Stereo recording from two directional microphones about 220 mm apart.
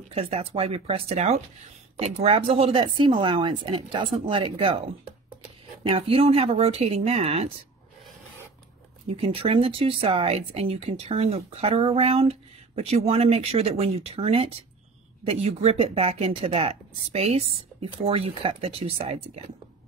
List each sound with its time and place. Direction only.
0.1 s speech: 25° right (ahead or behind)
5.9 s speech: 25° right (ahead or behind)
9.1 s speech: 25° right (ahead or behind)